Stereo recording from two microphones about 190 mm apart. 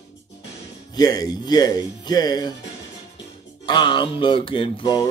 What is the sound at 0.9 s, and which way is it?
Speech, 20° left (ahead or behind).